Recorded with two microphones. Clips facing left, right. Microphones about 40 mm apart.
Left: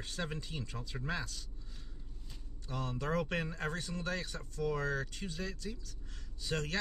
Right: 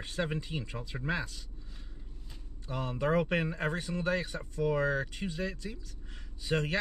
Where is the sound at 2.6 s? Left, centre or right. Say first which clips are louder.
Right 6 dB; centre.